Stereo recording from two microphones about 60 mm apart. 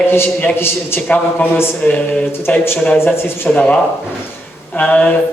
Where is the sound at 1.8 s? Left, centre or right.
Left.